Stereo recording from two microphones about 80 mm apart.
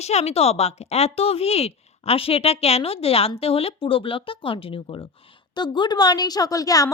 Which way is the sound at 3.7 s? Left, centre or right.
Left.